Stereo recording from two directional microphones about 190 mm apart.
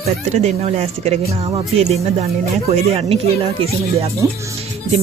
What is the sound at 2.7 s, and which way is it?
Speech, 35° right (ahead or behind).